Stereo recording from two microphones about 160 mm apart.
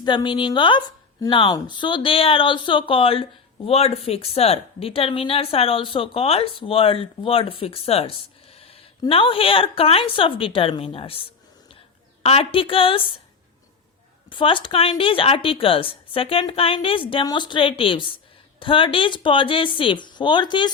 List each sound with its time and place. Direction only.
0.0 s a woman's voice: 30° left (ahead or behind)
14.3 s speech: 30° left (ahead or behind)